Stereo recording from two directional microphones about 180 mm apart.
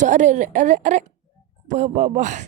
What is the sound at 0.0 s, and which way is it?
Speech, 40° right (ahead or behind).